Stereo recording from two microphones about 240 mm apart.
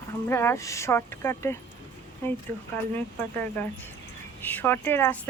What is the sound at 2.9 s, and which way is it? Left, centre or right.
A woman's voice, centre.